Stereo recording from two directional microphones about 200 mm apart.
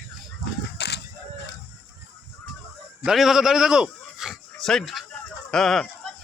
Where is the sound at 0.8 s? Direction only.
60° left (ahead or behind).